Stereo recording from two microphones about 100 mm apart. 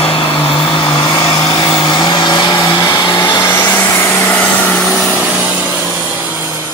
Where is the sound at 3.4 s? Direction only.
25° left (ahead or behind).